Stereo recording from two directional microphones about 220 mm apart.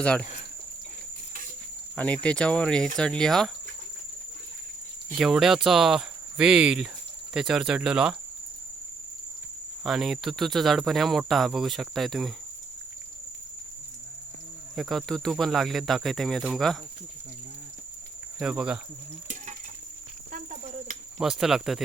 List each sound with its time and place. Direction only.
0.0 s cricket: 5° left (ahead or behind)
2.0 s cricket: 5° left (ahead or behind)
5.1 s cricket: centre (ahead or behind)
9.8 s cricket: centre (ahead or behind)
14.8 s cricket: centre (ahead or behind)
18.3 s cricket: 5° right (ahead or behind)
20.3 s cricket: 35° right (ahead or behind)
21.2 s cricket: centre (ahead or behind)